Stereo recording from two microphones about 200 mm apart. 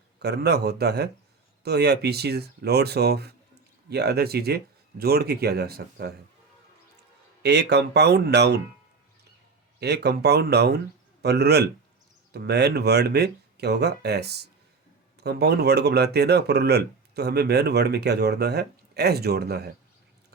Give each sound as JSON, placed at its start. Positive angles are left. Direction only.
{"t": 0.2, "sound": "speech", "side_deg": -55}
{"t": 7.4, "sound": "speech", "side_deg": -55}
{"t": 9.8, "sound": "speech", "side_deg": -55}